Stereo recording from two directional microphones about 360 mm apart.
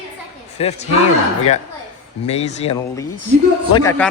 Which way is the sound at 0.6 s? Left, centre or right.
Centre.